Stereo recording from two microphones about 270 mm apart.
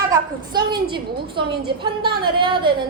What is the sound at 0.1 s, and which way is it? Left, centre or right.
A woman's voice, centre.